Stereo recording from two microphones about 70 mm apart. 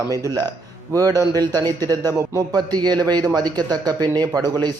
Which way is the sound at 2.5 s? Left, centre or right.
Right.